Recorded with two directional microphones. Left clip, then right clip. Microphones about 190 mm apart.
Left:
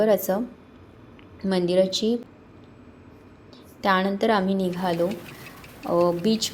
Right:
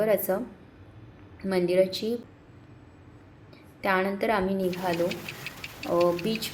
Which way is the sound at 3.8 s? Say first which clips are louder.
Left 4 dB; 25° left (ahead or behind).